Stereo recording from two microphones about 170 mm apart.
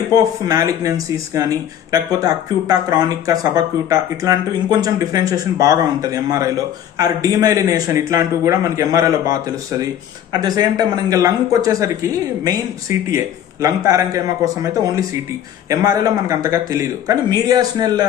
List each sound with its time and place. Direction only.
0.2 s a woman's voice: 20° right (ahead or behind)
10.4 s a woman's voice: 20° right (ahead or behind)